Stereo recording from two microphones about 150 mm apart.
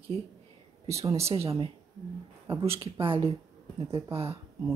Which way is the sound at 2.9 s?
35° right (ahead or behind).